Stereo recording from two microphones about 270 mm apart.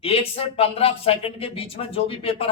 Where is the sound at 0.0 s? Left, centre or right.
Left.